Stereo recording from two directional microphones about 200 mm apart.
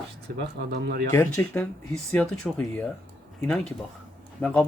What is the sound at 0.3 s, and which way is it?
Speech, 55° right (ahead or behind).